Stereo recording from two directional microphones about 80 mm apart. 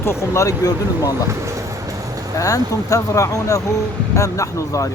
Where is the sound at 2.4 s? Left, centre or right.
Left.